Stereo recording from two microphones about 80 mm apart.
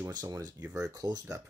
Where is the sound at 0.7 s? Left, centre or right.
Right.